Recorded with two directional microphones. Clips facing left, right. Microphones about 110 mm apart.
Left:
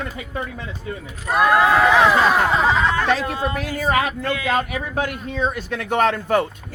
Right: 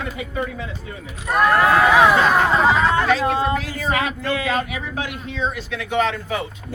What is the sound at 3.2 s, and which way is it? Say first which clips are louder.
Speech: right 4 dB; 30° right (ahead or behind).